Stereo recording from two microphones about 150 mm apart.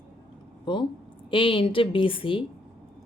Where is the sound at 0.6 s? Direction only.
30° left (ahead or behind).